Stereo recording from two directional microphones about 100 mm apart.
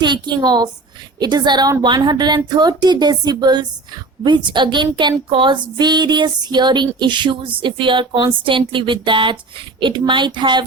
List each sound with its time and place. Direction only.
0.0 s speech: 50° right (ahead or behind)